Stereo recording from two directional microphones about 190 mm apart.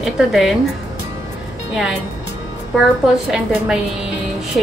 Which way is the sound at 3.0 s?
5° right (ahead or behind).